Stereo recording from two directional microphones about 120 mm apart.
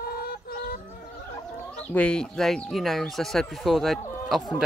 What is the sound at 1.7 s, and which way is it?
Speech, 10° left (ahead or behind).